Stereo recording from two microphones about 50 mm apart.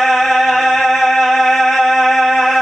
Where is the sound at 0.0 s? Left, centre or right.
Centre.